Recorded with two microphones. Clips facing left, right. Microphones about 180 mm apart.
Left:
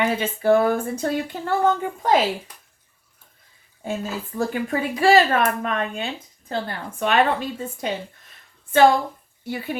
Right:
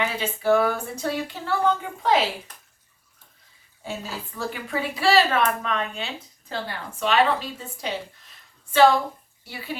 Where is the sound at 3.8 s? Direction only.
50° left (ahead or behind).